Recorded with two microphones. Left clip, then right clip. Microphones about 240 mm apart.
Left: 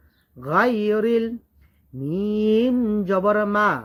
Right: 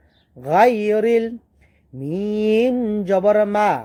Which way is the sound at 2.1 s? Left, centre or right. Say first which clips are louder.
Right 2 dB; right.